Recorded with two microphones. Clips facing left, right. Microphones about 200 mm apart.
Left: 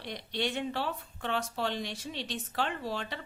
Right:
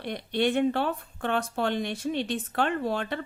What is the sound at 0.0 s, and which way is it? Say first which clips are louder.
A woman's voice: right 8 dB; 55° right (ahead or behind).